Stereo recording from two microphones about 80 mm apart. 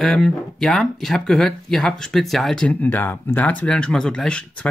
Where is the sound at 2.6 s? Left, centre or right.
Left.